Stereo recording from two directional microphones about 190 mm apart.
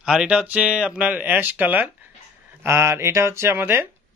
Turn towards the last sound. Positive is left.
turn(degrees=-10)  # may be behind; listen again after turning